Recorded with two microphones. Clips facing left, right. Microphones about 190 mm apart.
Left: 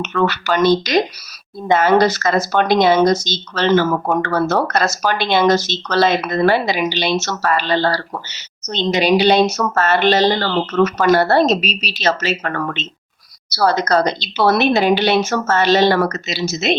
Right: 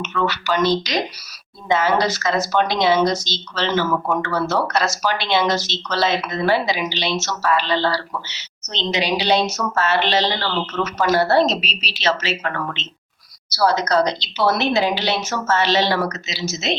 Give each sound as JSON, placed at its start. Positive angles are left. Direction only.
{"t": 0.0, "sound": "speech", "side_deg": 50}
{"t": 13.5, "sound": "a woman's voice", "side_deg": 55}